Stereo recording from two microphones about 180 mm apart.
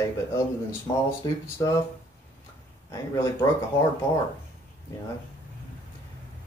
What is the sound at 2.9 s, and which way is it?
Speech, 20° left (ahead or behind).